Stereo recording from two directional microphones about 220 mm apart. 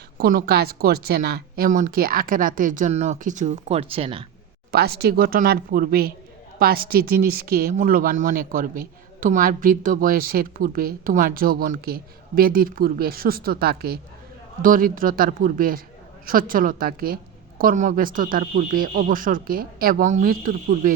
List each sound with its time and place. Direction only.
0.2 s a woman's voice: 40° right (ahead or behind); by 4.2 s 25° right (ahead or behind)
4.7 s a woman's voice: 45° right (ahead or behind)